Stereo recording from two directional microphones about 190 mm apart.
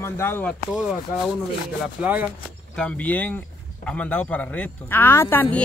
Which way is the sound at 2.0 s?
10° right (ahead or behind).